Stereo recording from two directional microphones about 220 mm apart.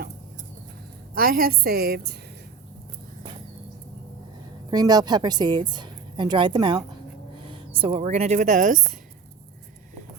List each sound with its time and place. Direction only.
1.1 s a woman's voice: 40° right (ahead or behind)
4.7 s speech: 20° right (ahead or behind); by 8.9 s 35° right (ahead or behind)